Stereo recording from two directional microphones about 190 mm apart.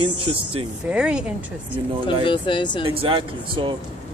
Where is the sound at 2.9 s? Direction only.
30° right (ahead or behind).